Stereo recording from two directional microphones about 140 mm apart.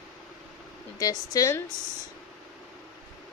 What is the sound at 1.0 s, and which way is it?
Speech, 25° left (ahead or behind).